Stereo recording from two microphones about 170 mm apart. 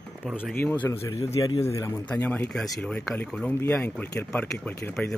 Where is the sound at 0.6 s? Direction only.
10° left (ahead or behind).